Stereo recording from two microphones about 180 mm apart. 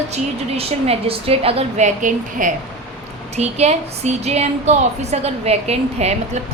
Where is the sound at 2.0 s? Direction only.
45° right (ahead or behind).